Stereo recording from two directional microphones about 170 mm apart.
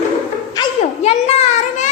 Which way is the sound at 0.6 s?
20° left (ahead or behind).